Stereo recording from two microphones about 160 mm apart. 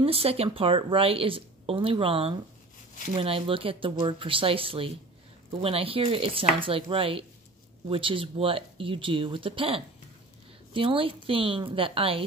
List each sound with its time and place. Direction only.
0.0 s speech: 35° right (ahead or behind)